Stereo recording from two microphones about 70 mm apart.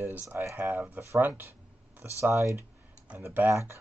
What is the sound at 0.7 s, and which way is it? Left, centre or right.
Speech, right.